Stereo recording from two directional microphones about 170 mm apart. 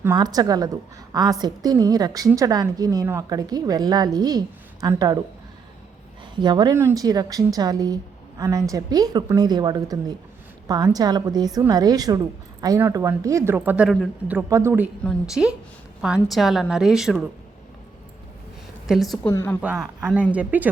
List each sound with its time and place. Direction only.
0.2 s a woman's voice: 20° right (ahead or behind)
6.3 s a woman's voice: 25° right (ahead or behind); by 14.3 s centre (ahead or behind)
14.3 s speech: 15° right (ahead or behind)
15.0 s a woman's voice: 5° right (ahead or behind)
18.9 s a woman's voice: centre (ahead or behind)
19.3 s speech: 15° left (ahead or behind)
19.6 s a woman's voice: 5° right (ahead or behind)